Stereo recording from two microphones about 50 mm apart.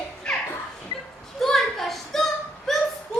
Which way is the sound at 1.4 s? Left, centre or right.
Centre.